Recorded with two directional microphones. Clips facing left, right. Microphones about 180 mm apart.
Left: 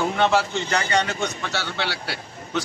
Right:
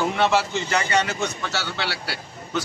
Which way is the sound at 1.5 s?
30° right (ahead or behind).